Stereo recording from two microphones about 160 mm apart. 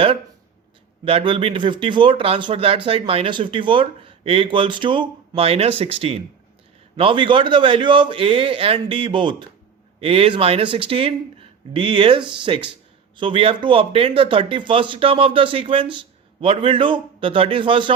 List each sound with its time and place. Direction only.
1.0 s speech: 35° right (ahead or behind)